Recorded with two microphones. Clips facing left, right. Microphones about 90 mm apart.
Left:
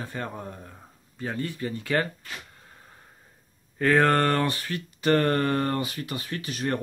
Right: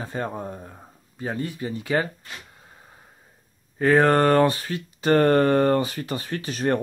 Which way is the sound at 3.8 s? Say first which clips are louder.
Right 3 dB; 20° right (ahead or behind).